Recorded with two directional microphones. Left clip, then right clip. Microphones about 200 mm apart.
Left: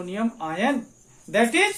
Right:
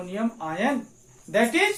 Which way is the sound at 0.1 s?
35° left (ahead or behind).